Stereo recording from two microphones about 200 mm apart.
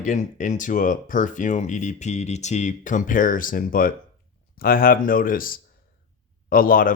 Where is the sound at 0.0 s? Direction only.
40° left (ahead or behind).